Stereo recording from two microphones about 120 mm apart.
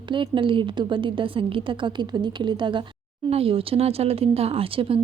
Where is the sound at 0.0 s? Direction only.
45° right (ahead or behind).